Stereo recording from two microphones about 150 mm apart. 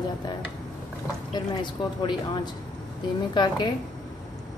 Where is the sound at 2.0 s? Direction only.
30° left (ahead or behind).